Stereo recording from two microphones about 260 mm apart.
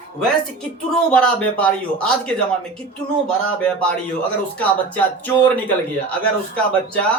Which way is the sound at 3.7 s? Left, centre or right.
Centre.